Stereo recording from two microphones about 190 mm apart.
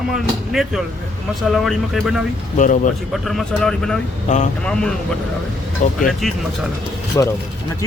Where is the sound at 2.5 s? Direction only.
40° left (ahead or behind).